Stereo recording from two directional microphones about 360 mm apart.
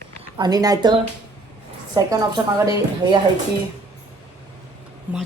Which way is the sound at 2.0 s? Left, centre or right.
Centre.